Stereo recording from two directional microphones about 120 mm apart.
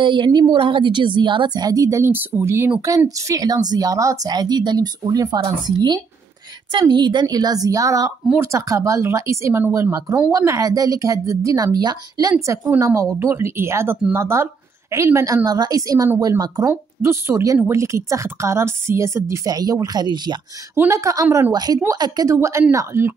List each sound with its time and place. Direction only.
0.0 s a woman's voice: 45° right (ahead or behind)
20.7 s a woman's voice: 20° right (ahead or behind)